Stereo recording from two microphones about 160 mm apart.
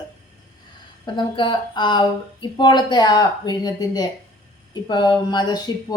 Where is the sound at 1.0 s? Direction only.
30° left (ahead or behind).